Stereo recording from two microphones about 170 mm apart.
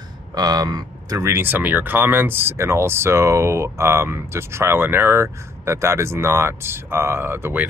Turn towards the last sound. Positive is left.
turn(degrees=-15)  # may be behind; listen again after turning